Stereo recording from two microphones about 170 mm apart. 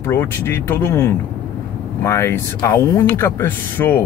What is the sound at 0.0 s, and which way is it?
Speech, 15° left (ahead or behind).